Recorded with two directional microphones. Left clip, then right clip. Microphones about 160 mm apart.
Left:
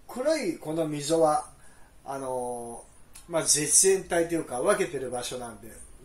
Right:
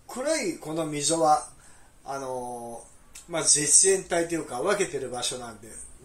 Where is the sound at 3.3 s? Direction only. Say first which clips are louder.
Right 2 dB; 25° left (ahead or behind).